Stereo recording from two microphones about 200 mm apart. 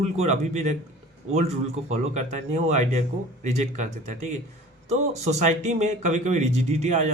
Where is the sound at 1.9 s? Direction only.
35° right (ahead or behind).